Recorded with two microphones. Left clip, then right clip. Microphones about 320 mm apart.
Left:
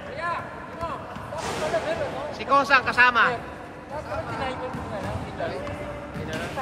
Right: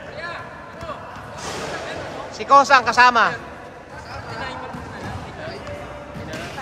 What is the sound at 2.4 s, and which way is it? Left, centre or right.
Speech, right.